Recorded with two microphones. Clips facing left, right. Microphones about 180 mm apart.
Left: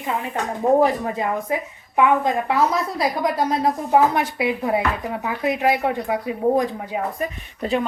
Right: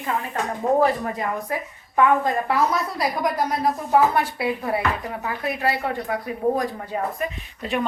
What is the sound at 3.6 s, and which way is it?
Speech, 20° left (ahead or behind).